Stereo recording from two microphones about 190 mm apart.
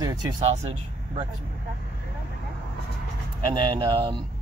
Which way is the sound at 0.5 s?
35° right (ahead or behind).